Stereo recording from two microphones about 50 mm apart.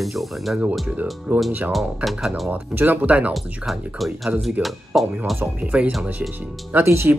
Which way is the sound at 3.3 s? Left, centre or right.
Centre.